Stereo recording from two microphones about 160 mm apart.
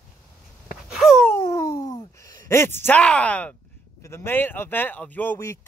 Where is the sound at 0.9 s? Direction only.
Centre (ahead or behind).